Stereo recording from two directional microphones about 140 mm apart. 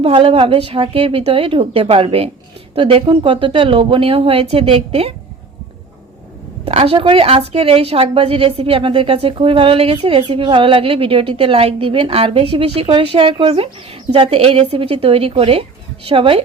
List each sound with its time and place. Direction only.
0.0 s a woman's voice: 40° right (ahead or behind)
6.7 s a woman's voice: 45° right (ahead or behind)